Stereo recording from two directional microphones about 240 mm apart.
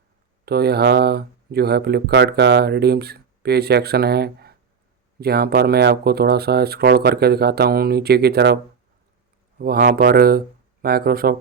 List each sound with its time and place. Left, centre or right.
0.4 s speech: right
9.6 s speech: right